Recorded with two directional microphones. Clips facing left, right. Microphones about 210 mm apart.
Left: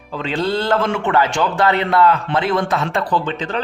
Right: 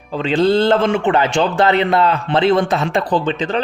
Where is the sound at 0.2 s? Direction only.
20° right (ahead or behind).